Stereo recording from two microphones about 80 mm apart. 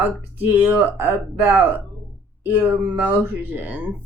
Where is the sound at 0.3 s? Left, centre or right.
Right.